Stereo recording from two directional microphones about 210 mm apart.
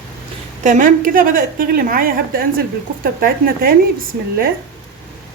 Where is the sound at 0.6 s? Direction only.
35° right (ahead or behind).